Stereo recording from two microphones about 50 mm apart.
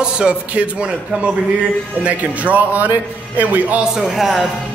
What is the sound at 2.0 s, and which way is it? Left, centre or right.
A man's voice, right.